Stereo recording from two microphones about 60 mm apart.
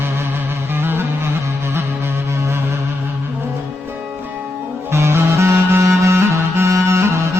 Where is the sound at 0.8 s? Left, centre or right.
Right.